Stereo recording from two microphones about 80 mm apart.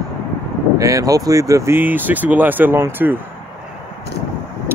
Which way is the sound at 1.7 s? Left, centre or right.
Right.